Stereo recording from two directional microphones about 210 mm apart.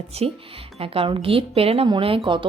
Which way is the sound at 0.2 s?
30° right (ahead or behind).